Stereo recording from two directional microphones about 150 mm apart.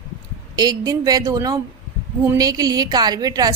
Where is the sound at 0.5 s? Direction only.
25° right (ahead or behind).